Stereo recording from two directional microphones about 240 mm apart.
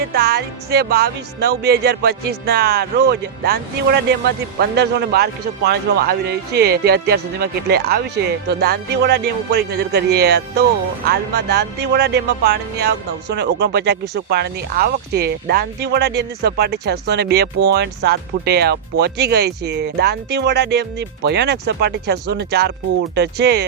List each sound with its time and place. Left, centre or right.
0.1 s a man's voice: right